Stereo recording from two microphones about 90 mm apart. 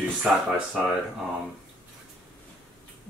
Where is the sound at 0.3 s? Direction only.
5° right (ahead or behind).